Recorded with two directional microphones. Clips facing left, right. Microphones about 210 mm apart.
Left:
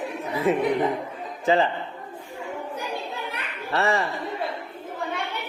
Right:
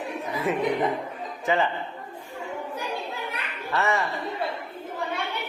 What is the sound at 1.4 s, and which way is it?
Speech, 30° left (ahead or behind).